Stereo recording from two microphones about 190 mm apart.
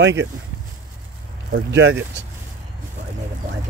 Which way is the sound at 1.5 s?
65° right (ahead or behind).